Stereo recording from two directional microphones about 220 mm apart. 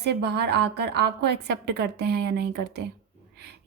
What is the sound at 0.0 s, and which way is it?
A woman's voice, 50° right (ahead or behind).